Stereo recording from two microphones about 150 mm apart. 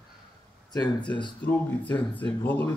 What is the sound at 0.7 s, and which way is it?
Speech, 30° left (ahead or behind).